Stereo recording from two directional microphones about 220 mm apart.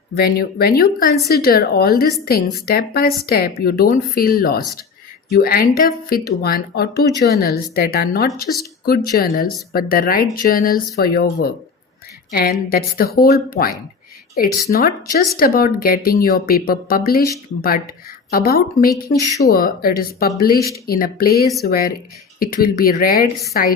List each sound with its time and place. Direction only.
0.2 s speech: 45° left (ahead or behind)
18.3 s speech: 45° left (ahead or behind)